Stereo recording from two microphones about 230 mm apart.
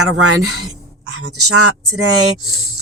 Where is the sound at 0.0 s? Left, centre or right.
Right.